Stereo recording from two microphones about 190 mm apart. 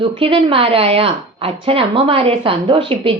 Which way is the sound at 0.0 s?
30° right (ahead or behind).